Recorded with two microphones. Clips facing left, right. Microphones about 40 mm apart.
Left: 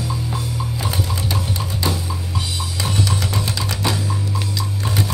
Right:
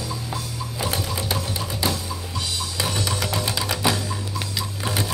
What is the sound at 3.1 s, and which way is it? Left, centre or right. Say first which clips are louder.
Music: left 2 dB; centre.